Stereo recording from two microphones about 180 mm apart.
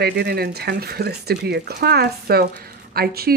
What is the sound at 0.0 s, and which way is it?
Speech, 60° right (ahead or behind).